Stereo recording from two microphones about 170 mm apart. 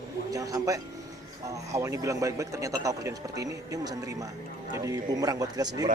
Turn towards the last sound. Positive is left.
turn(degrees=-20)  # may be behind; listen again after turning